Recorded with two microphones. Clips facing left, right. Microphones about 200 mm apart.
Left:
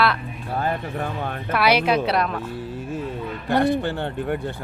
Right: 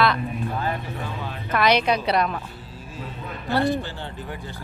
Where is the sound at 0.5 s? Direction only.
55° left (ahead or behind).